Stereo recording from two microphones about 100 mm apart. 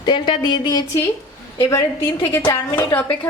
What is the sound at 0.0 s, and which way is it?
Speech, 50° left (ahead or behind).